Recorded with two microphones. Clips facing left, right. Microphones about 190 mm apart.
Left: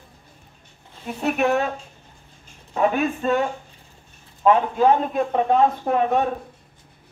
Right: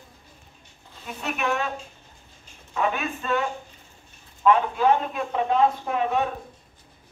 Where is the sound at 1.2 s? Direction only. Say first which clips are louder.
Left 7 dB; 40° left (ahead or behind).